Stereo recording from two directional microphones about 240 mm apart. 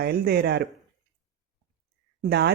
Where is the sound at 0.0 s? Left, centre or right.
Right.